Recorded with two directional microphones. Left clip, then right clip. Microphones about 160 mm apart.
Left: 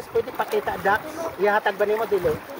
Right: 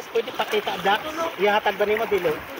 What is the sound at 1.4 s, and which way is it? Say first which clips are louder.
Speech: even; 10° right (ahead or behind).